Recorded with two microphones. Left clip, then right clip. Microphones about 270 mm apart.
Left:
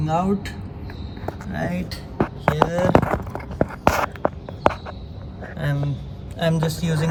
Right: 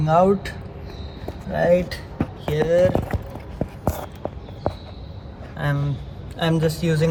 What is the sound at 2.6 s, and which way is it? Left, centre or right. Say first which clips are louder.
Speech: right 5 dB; centre.